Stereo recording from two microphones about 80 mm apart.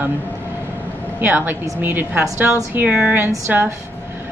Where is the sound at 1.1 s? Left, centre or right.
Right.